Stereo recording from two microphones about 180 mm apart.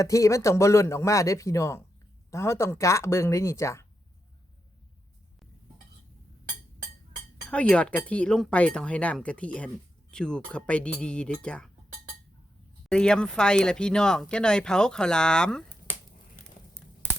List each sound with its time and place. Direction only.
0.0 s speech: 15° left (ahead or behind)
7.5 s speech: 5° left (ahead or behind)
12.9 s speech: 5° left (ahead or behind)